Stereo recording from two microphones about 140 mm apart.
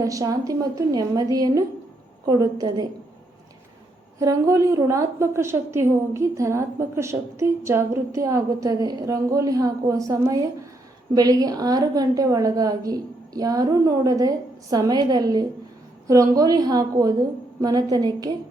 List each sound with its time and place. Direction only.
0.0 s a woman's voice: 25° right (ahead or behind)
4.2 s a woman's voice: 25° right (ahead or behind)